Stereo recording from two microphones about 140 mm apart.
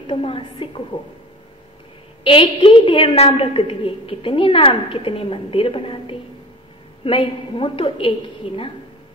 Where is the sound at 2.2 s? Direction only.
40° left (ahead or behind).